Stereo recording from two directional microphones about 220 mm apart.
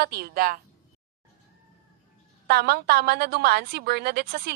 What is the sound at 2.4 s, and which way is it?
A woman's voice, 45° right (ahead or behind).